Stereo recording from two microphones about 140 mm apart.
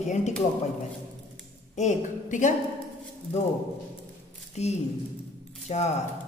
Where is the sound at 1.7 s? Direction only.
60° left (ahead or behind).